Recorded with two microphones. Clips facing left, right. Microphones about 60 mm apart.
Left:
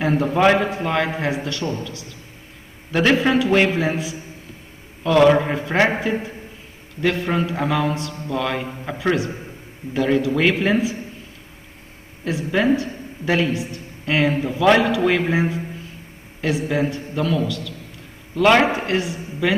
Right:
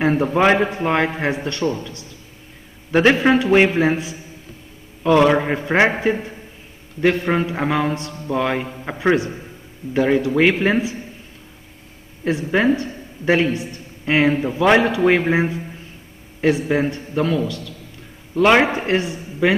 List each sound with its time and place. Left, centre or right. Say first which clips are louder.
0.0 s speech: right 2 dB; right
0.3 s a man's voice: left 2 dB; centre
2.9 s a man's voice: right 3 dB; right
5.0 s a man's voice: even; right
7.0 s a man's voice: right 3 dB; right
12.3 s a man's voice: right 1 dB; right
18.4 s a man's voice: right 1 dB; centre
18.8 s a woman's voice: right 2 dB; right